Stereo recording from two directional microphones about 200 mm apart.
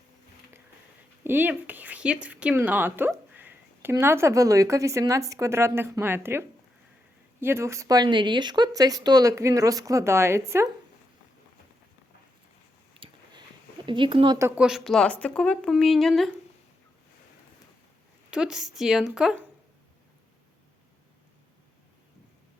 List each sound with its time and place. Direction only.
1.2 s speech: 10° right (ahead or behind)
7.4 s speech: 15° right (ahead or behind)
13.0 s a sound: 25° right (ahead or behind)
13.8 s speech: 25° right (ahead or behind)
14.3 s a woman's voice: 10° right (ahead or behind)
18.3 s a woman's voice: 5° right (ahead or behind)